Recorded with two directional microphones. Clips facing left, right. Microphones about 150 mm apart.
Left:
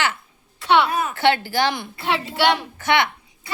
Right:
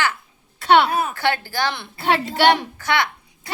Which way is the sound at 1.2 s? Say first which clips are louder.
Left 3 dB; 20° left (ahead or behind).